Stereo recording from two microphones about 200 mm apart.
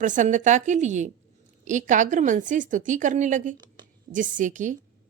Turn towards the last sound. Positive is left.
turn(degrees=-40)  # may be behind; listen again after turning